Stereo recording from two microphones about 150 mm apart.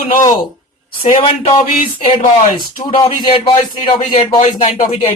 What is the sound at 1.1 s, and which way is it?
Speech, 50° left (ahead or behind).